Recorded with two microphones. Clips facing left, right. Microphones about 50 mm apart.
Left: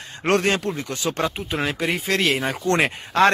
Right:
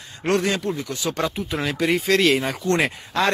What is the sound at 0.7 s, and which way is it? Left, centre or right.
Speech, left.